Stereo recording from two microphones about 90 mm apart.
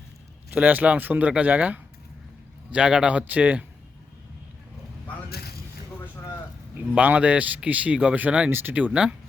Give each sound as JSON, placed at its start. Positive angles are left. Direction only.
{"t": 0.5, "sound": "speech", "side_deg": -20}
{"t": 6.9, "sound": "speech", "side_deg": -15}